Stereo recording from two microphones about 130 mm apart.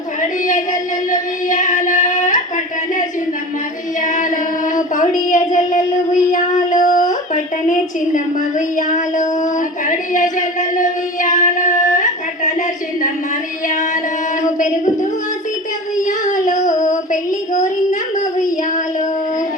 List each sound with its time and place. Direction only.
0.2 s child singing: 85° left
4.0 s female singing: 80° left
4.7 s child singing: 80° left
7.7 s a sound: 80° left
16.0 s child singing: 90° left